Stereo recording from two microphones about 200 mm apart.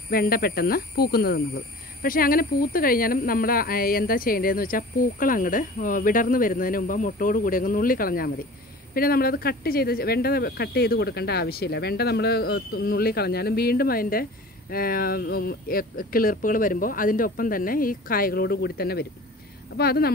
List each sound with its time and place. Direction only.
0.1 s speech: 50° left (ahead or behind)